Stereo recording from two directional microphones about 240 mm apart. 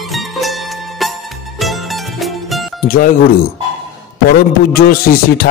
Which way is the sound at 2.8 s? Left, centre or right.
Left.